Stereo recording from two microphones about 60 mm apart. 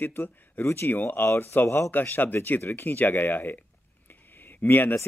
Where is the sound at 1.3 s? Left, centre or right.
Left.